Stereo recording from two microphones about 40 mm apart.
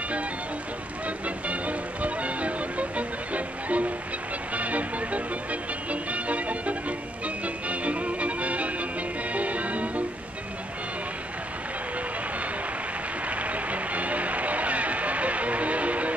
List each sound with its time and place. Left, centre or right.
1.0 s music: right
13.3 s music: right